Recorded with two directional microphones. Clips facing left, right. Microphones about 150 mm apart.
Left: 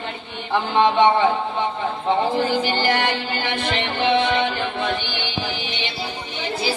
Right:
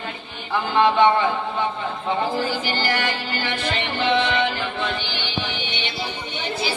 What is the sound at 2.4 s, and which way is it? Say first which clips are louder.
Music: left 4 dB; 20° left (ahead or behind).